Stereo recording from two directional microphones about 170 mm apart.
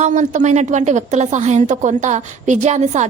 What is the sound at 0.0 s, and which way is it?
A woman's voice, 45° right (ahead or behind).